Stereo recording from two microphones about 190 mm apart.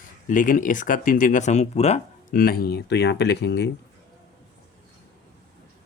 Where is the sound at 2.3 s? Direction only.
50° left (ahead or behind).